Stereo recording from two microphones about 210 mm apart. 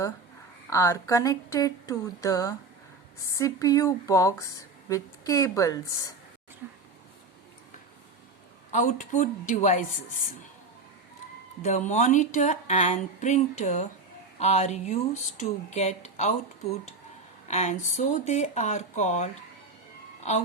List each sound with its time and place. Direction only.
0.7 s speech: 15° left (ahead or behind)
6.6 s a sound: 10° right (ahead or behind)
8.7 s speech: 35° left (ahead or behind)
11.6 s speech: 35° left (ahead or behind)
17.5 s speech: 35° left (ahead or behind)